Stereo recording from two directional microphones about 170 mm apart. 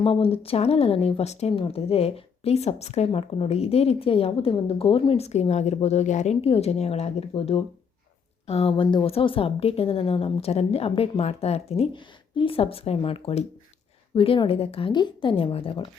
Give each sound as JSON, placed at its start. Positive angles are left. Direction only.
{"t": 0.0, "sound": "speech", "side_deg": 35}